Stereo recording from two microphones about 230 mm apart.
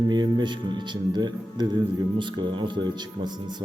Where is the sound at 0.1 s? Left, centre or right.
Centre.